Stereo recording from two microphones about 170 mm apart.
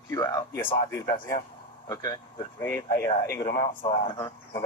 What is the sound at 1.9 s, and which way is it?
Speech, 20° left (ahead or behind).